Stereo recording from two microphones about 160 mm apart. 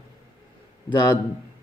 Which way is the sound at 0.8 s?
25° left (ahead or behind).